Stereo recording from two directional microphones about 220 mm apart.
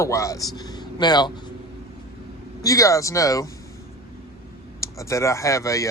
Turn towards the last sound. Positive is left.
turn(degrees=15)  # may be behind; listen again after turning